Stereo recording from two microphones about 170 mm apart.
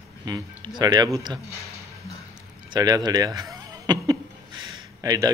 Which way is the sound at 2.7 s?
25° right (ahead or behind).